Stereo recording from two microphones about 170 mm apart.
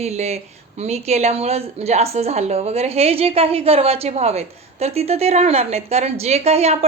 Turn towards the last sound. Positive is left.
turn(degrees=-40)  # may be behind; listen again after turning